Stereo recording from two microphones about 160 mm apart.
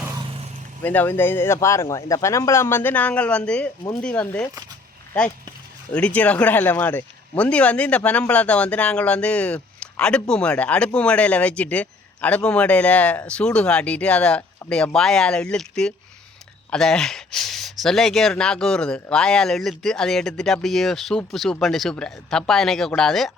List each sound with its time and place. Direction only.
0.8 s speech: 10° left (ahead or behind)
5.9 s speech: 5° left (ahead or behind)